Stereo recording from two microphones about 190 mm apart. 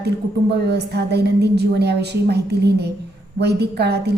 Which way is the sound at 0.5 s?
60° right (ahead or behind).